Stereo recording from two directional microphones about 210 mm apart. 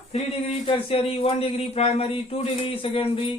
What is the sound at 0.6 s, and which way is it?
Speech, 25° left (ahead or behind).